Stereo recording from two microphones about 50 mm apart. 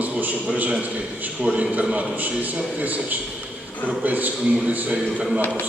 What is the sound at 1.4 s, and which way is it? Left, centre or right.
Speech, centre.